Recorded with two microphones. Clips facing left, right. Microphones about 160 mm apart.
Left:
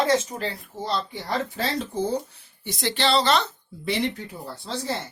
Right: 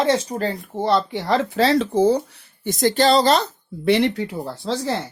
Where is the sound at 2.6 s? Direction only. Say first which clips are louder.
Right 8 dB; 45° right (ahead or behind).